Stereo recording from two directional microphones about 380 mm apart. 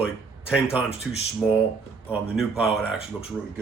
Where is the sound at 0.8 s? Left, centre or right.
Centre.